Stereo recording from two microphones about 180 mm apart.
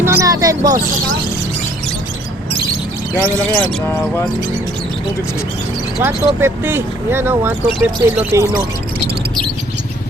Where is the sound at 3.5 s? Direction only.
15° left (ahead or behind).